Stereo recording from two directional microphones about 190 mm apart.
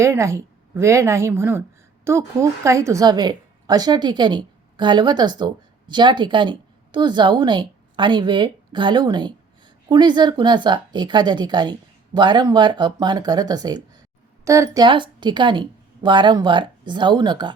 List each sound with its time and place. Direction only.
0.0 s a woman's voice: 15° right (ahead or behind)